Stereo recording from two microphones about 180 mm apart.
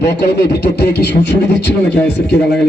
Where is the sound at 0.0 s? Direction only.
70° left (ahead or behind).